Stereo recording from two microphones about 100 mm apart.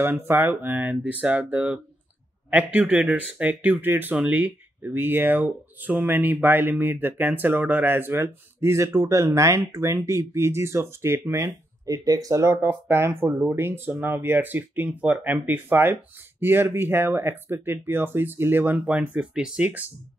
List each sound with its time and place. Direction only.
0.0 s speech: 20° right (ahead or behind)
11.4 s speech: 35° right (ahead or behind)
12.4 s speech: 20° right (ahead or behind)